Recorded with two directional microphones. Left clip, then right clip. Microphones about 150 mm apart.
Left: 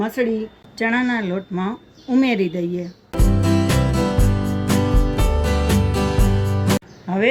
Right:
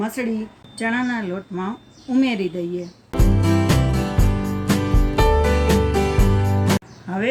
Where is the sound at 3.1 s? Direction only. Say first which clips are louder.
Even; 5° left (ahead or behind).